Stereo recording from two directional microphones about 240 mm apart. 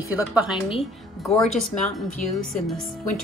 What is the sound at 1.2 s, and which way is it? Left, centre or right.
Speech, centre.